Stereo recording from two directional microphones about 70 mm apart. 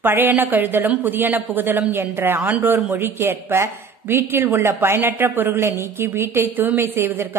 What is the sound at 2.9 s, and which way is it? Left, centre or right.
A woman's voice, right.